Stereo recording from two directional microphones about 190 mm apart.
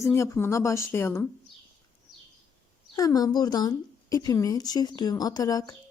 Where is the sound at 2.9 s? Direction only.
20° left (ahead or behind).